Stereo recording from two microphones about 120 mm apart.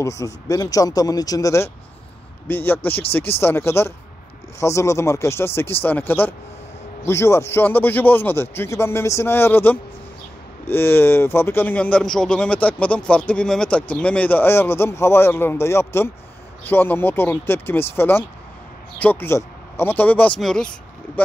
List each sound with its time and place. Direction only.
0.0 s a man's voice: 25° left (ahead or behind)
20.3 s speech: 5° left (ahead or behind)